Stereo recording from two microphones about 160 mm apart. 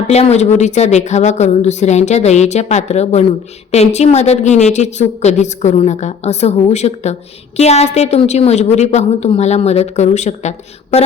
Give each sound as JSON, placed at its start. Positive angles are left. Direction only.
{"t": 0.1, "sound": "a woman's voice", "side_deg": 45}